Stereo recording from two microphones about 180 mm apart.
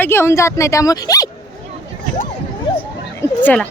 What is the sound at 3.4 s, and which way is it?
Speech, 10° left (ahead or behind).